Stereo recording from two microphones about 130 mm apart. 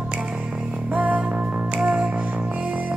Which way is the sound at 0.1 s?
10° right (ahead or behind).